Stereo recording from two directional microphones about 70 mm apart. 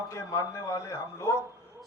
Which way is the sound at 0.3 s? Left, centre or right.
Left.